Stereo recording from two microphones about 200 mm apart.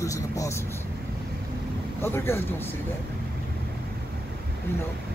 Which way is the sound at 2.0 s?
10° left (ahead or behind).